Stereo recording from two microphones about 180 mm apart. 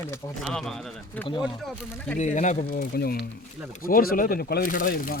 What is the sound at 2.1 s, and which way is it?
Speech, 40° left (ahead or behind).